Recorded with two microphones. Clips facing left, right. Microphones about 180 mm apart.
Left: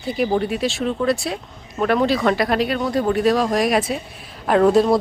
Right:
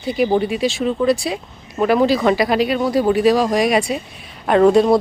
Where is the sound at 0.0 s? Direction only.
Centre (ahead or behind).